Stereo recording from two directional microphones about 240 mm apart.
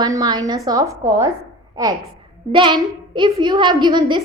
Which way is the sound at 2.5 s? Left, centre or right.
Centre.